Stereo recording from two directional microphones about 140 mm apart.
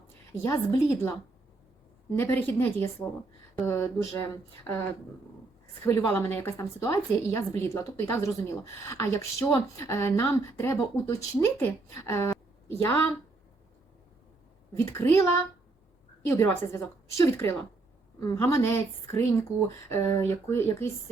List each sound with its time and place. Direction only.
0.3 s a woman's voice: 20° left (ahead or behind)
2.1 s speech: 15° left (ahead or behind)
5.8 s a woman's voice: 20° left (ahead or behind)
14.8 s a woman's voice: 20° left (ahead or behind)